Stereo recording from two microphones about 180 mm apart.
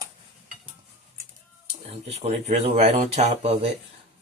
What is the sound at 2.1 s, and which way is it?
Speech, 35° right (ahead or behind).